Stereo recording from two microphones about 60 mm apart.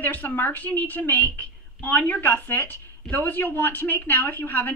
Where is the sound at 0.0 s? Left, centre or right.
Left.